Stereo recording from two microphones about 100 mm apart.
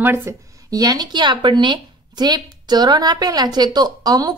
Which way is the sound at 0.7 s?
35° right (ahead or behind).